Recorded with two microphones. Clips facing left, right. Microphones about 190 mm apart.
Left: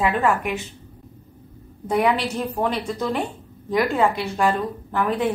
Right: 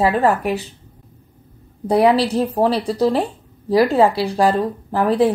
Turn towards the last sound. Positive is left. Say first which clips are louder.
# right 6 dB
turn(degrees=-35)  # may be behind; listen again after turning